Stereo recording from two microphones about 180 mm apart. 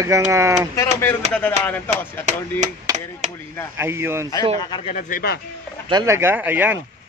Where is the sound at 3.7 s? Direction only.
15° right (ahead or behind).